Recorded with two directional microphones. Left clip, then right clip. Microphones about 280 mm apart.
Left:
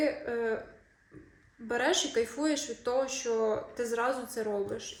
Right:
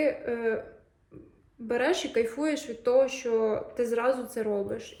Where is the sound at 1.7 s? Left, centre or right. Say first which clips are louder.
Right 2 dB; right.